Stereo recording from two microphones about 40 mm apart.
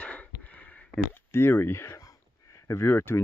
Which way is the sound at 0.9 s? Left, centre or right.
Left.